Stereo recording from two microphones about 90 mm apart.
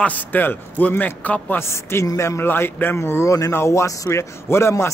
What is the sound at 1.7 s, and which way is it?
Speech, 30° left (ahead or behind).